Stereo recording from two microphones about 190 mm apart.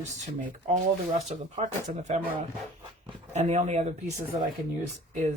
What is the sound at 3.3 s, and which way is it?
Speech, 35° right (ahead or behind).